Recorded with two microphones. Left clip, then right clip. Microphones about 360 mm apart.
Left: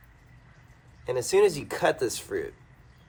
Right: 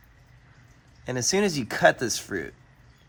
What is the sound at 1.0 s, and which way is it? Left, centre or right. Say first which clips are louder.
Speech: left 3 dB; right.